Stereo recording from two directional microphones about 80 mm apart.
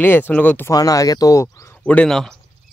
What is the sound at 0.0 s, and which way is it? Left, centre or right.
Speech, left.